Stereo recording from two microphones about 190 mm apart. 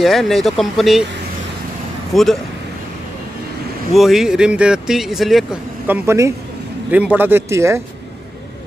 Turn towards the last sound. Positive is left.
turn(degrees=-15)  # may be behind; listen again after turning